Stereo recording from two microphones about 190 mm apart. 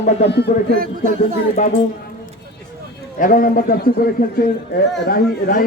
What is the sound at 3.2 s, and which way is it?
A man's voice, 45° left (ahead or behind).